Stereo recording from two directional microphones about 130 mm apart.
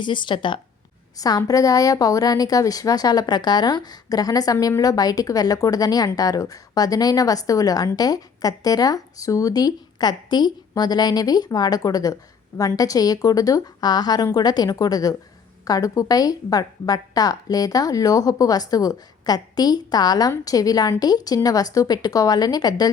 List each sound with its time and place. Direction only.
0.0 s a woman's voice: 35° left (ahead or behind)